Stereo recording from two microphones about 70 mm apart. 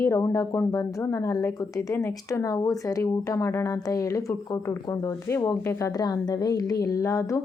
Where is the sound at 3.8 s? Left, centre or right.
Left.